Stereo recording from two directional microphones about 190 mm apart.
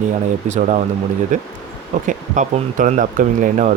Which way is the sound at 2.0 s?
40° right (ahead or behind).